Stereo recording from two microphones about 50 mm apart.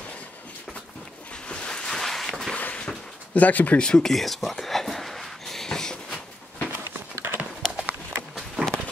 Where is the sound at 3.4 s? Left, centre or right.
Left.